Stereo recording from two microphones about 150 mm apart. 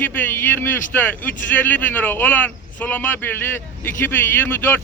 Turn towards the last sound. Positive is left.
turn(degrees=15)  # may be behind; listen again after turning